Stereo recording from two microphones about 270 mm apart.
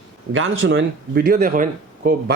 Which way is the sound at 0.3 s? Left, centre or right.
Right.